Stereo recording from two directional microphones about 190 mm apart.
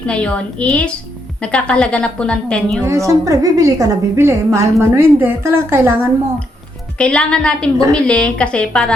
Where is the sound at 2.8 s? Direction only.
15° right (ahead or behind).